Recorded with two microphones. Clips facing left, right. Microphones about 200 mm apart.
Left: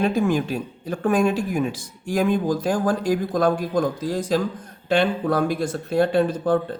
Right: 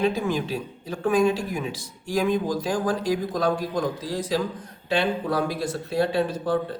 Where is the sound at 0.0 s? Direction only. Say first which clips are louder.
Left 3 dB; 50° left (ahead or behind).